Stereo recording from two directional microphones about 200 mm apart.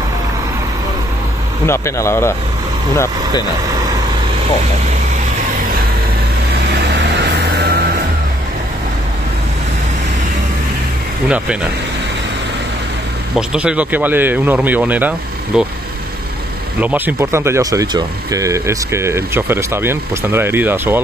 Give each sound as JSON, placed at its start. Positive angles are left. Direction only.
{"t": 1.7, "sound": "speech", "side_deg": 15}
{"t": 7.0, "sound": "vehicle", "side_deg": -55}
{"t": 11.2, "sound": "speech", "side_deg": -5}
{"t": 13.4, "sound": "speech", "side_deg": -5}
{"t": 16.8, "sound": "speech", "side_deg": -10}